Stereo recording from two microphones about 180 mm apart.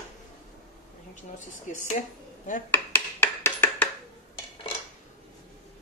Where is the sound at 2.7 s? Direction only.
10° left (ahead or behind).